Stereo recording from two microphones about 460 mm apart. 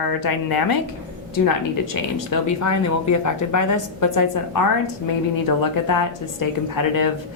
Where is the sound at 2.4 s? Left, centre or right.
Left.